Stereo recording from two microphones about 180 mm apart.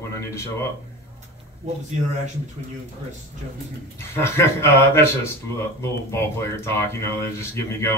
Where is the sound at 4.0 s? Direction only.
15° left (ahead or behind).